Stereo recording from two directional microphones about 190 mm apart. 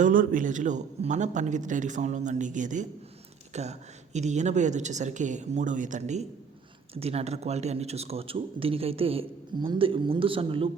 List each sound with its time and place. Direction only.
0.0 s a man's voice: 45° right (ahead or behind); by 10.7 s 30° right (ahead or behind)